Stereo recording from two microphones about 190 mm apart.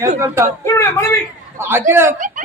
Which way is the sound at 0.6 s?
15° left (ahead or behind).